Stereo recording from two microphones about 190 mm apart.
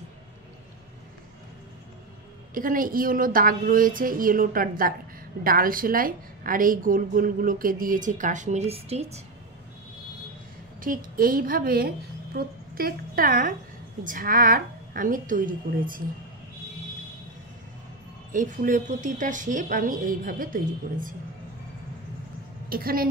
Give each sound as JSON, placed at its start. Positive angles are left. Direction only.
{"t": 2.5, "sound": "a woman's voice", "side_deg": -45}
{"t": 11.1, "sound": "a woman's voice", "side_deg": -50}
{"t": 18.3, "sound": "a woman's voice", "side_deg": -45}
{"t": 22.7, "sound": "a woman's voice", "side_deg": -50}